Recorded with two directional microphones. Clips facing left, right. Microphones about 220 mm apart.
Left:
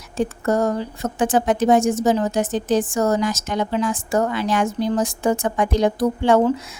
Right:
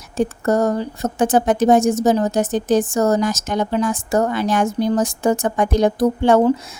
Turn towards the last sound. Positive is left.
turn(degrees=-45)  # may be behind; listen again after turning